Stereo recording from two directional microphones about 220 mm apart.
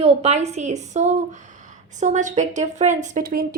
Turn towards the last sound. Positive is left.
turn(degrees=-40)  # may be behind; listen again after turning